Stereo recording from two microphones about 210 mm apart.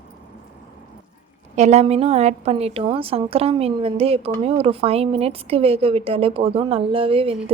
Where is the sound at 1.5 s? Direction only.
30° right (ahead or behind).